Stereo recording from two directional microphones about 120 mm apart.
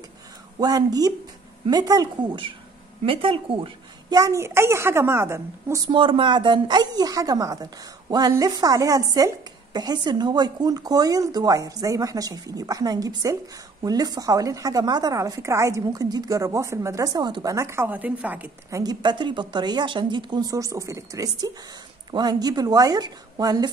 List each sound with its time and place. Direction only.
0.6 s a woman's voice: 30° right (ahead or behind)
3.0 s speech: 50° right (ahead or behind)
4.1 s a woman's voice: 30° right (ahead or behind)
5.9 s a woman's voice: 45° right (ahead or behind); by 18.5 s 15° right (ahead or behind)
18.7 s a woman's voice: 35° right (ahead or behind)